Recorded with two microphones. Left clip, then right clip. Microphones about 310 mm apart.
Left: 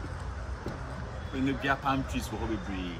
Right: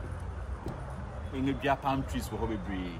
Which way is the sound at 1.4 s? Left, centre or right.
Right.